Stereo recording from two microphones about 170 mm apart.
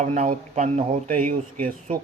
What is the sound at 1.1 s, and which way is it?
Speech, 55° right (ahead or behind).